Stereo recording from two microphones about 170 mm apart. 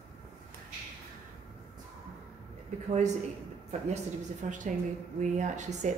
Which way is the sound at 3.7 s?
40° right (ahead or behind).